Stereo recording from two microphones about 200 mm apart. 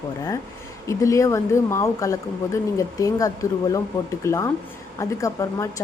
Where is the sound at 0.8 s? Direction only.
15° left (ahead or behind).